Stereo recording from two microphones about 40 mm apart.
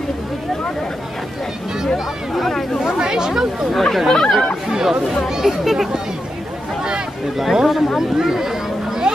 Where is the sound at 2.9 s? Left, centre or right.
Centre.